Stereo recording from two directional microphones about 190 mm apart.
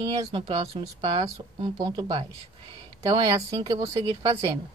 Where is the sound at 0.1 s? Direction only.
25° right (ahead or behind).